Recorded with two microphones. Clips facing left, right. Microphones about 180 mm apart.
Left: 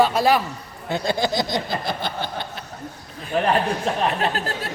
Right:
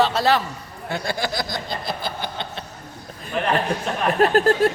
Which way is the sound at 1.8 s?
5° right (ahead or behind).